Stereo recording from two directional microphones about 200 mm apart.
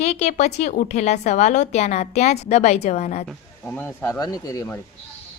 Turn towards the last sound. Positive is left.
turn(degrees=15)  # may be behind; listen again after turning